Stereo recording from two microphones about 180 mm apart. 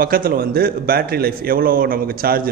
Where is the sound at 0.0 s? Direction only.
55° right (ahead or behind).